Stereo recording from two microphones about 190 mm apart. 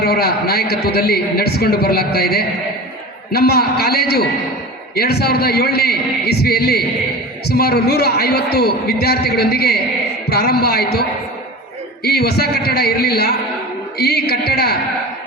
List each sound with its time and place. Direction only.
0.0 s a man's voice: 55° left (ahead or behind)
12.0 s a man's voice: 55° left (ahead or behind)